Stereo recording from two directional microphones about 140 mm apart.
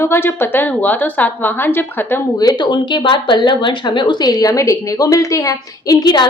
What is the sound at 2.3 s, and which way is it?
Speech, 30° left (ahead or behind).